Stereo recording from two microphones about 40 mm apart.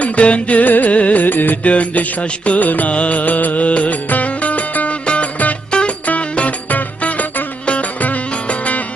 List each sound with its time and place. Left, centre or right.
0.0 s music: left
1.6 s music: left